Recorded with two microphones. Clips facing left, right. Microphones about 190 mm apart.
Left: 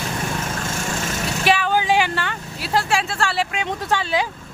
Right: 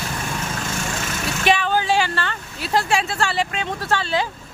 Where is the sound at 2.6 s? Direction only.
Centre (ahead or behind).